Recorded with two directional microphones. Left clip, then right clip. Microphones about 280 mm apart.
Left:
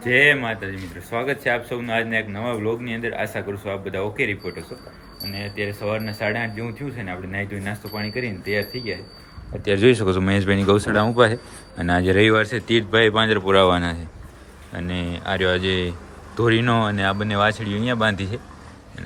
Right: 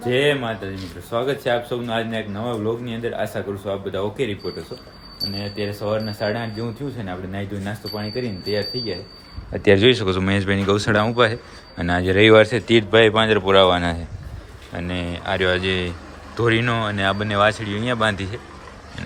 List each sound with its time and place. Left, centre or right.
0.0 s speech: centre
5.3 s speech: centre
9.7 s a man's voice: centre